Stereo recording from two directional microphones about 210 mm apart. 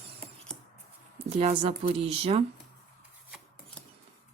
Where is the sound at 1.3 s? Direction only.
30° right (ahead or behind).